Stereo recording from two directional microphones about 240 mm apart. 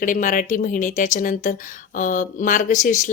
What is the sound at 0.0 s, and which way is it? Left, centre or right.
Speech, left.